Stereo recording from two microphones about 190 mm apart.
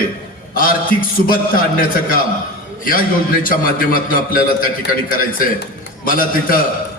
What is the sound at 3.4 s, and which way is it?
A man's voice, 50° left (ahead or behind).